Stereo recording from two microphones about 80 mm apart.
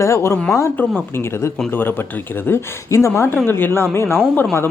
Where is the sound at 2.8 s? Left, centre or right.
Left.